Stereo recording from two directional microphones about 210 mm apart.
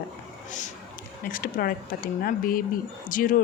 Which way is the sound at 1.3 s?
45° left (ahead or behind).